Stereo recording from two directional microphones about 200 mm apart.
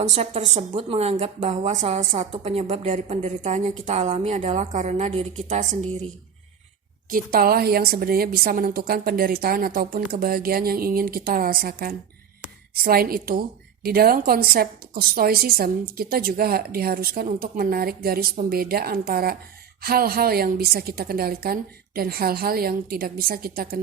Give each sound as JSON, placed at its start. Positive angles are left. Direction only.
{"t": 0.0, "sound": "a woman's voice", "side_deg": -30}
{"t": 7.1, "sound": "a woman's voice", "side_deg": -50}